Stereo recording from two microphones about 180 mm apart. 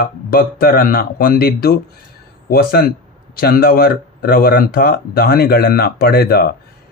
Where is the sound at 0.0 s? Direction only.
55° left (ahead or behind).